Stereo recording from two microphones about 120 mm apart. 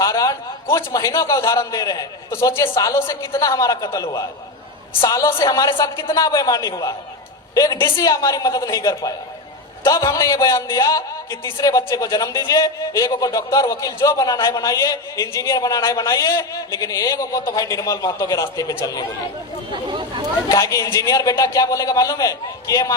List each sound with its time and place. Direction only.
0.0 s a sound: 30° left (ahead or behind)
0.9 s a woman's voice: 25° left (ahead or behind); by 6.1 s 45° left (ahead or behind)
6.1 s a woman's voice: 30° left (ahead or behind)
19.9 s speech: 40° right (ahead or behind)
20.5 s a woman's voice: 30° left (ahead or behind)